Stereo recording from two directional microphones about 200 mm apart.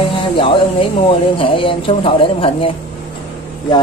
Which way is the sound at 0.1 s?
25° left (ahead or behind).